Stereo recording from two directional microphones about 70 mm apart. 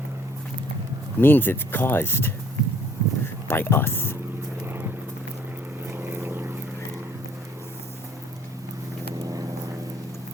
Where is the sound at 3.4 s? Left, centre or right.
Left.